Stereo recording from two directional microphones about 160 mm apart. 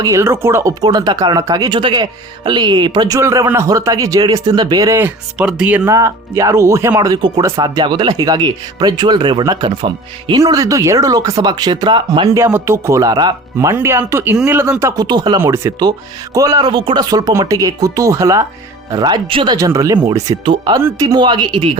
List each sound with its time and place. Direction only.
0.0 s speech: 15° right (ahead or behind)
5.8 s speech: 20° right (ahead or behind)
12.3 s speech: 15° right (ahead or behind)
15.4 s speech: 15° right (ahead or behind)